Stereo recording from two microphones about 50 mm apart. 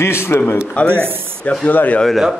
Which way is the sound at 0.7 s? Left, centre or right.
Left.